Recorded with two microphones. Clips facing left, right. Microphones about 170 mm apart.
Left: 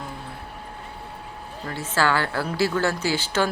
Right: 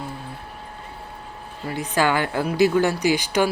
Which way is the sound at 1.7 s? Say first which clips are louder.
Right 2 dB; 15° right (ahead or behind).